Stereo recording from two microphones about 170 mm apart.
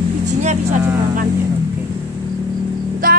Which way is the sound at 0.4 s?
40° right (ahead or behind).